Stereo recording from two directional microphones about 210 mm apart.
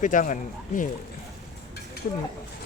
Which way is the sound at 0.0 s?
35° left (ahead or behind).